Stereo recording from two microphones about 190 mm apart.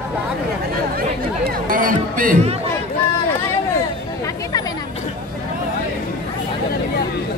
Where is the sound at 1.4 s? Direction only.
45° right (ahead or behind).